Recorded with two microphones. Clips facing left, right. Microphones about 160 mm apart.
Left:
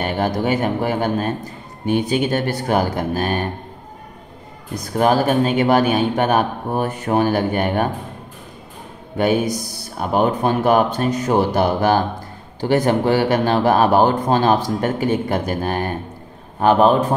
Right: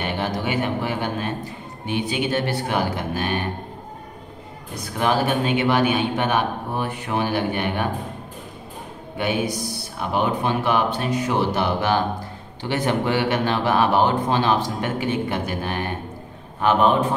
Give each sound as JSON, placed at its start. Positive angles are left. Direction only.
{"t": 0.0, "sound": "speech", "side_deg": 45}
{"t": 4.9, "sound": "speech", "side_deg": 40}
{"t": 9.2, "sound": "a man's voice", "side_deg": 45}